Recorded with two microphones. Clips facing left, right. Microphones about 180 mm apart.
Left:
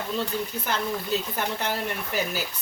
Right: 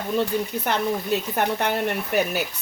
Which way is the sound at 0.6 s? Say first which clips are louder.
Right 5 dB; 60° right (ahead or behind).